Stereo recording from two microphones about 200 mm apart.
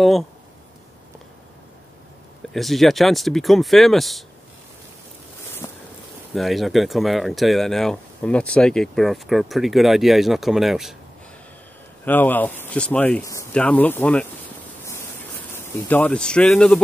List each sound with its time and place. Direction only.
2.5 s speech: centre (ahead or behind)
5.6 s boat: 15° left (ahead or behind)
6.3 s speech: centre (ahead or behind)
12.0 s speech: 10° left (ahead or behind)
14.9 s a sound: 10° left (ahead or behind)